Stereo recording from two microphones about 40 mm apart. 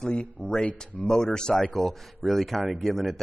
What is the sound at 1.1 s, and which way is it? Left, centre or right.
Speech, left.